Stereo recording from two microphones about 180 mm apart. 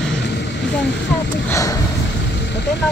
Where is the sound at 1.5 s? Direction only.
15° left (ahead or behind).